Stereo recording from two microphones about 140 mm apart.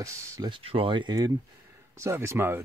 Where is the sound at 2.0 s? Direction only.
20° right (ahead or behind).